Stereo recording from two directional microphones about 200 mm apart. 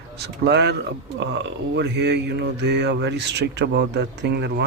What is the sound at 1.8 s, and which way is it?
Speech, 60° right (ahead or behind).